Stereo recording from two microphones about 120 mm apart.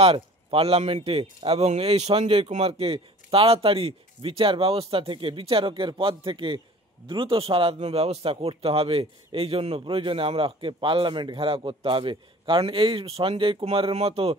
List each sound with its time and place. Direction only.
0.0 s a man's voice: 55° right (ahead or behind)